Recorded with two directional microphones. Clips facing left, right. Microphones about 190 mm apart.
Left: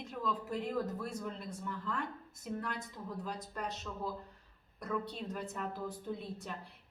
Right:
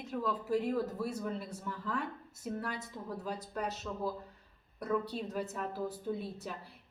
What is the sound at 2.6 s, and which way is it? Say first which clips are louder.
A woman's voice: right 1 dB; 5° right (ahead or behind).